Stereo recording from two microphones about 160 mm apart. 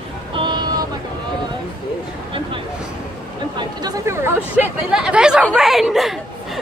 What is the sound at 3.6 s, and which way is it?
Chatter, 25° right (ahead or behind).